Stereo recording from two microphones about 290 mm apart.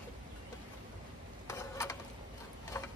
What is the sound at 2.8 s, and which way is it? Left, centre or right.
Tick-tock, centre.